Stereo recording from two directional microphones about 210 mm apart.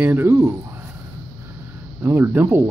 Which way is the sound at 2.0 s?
10° right (ahead or behind).